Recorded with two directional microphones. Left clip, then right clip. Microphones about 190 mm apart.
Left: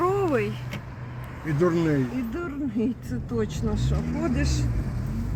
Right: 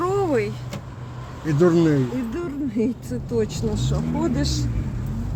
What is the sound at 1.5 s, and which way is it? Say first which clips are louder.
Speech: right 5 dB; 55° right (ahead or behind).